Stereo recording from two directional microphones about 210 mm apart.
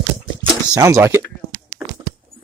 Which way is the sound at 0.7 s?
15° right (ahead or behind).